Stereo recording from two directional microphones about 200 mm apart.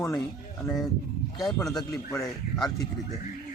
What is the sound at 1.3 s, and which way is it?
Speech, centre (ahead or behind).